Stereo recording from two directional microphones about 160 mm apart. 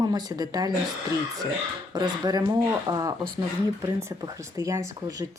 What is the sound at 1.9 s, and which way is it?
Speech, 25° right (ahead or behind).